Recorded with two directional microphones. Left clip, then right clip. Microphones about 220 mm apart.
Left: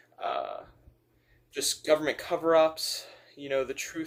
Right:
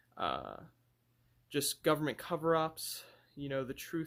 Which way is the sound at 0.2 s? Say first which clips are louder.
Left 5 dB; 45° right (ahead or behind).